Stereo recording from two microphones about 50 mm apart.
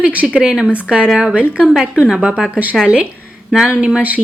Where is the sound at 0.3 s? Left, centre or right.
Centre.